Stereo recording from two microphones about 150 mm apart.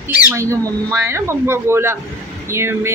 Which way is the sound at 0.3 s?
20° right (ahead or behind).